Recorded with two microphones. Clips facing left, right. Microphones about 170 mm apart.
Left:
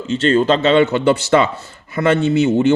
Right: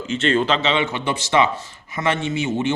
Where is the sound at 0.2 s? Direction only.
40° left (ahead or behind).